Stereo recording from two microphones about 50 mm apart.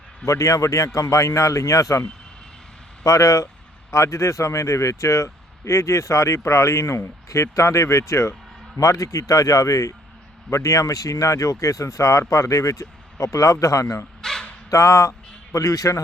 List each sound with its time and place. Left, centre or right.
0.3 s speech: left
8.8 s speech: left
14.2 s dog: centre
14.7 s speech: left